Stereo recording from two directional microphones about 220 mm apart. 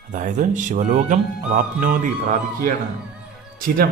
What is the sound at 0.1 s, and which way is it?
Speech, 35° right (ahead or behind).